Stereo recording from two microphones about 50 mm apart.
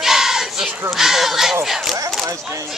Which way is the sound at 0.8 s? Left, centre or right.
Centre.